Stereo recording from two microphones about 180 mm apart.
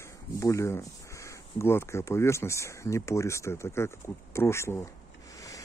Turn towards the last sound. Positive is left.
turn(degrees=20)  # may be behind; listen again after turning